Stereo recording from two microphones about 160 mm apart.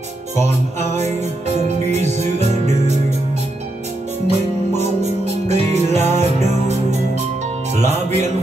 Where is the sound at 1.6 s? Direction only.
45° right (ahead or behind).